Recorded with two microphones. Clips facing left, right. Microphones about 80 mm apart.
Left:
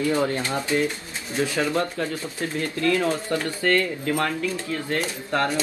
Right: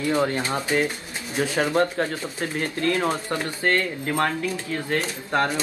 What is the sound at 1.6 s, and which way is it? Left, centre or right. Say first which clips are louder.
Speech: right 5 dB; right.